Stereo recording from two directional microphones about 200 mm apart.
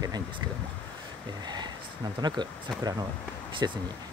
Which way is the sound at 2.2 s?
20° right (ahead or behind).